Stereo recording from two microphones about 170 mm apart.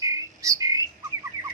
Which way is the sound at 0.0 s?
20° right (ahead or behind).